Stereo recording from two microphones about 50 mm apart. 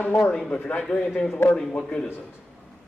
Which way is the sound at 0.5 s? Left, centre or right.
Left.